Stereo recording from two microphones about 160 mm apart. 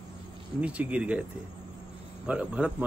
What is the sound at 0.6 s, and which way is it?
Speech, 10° right (ahead or behind).